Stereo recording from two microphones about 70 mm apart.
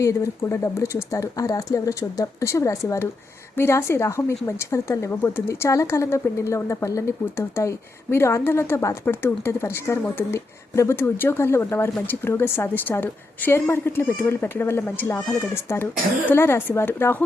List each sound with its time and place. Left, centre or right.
0.0 s a woman's voice: left
9.0 s a woman's voice: left